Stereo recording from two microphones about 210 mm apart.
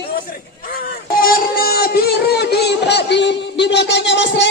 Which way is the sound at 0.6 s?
45° left (ahead or behind).